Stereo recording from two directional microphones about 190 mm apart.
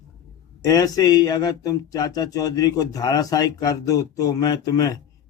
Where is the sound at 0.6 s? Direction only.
20° left (ahead or behind).